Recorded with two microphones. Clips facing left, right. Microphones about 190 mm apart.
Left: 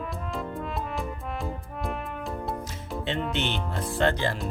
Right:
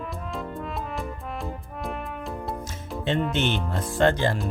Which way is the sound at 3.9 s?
45° right (ahead or behind).